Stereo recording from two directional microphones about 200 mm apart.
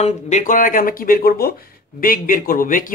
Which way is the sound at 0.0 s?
35° left (ahead or behind).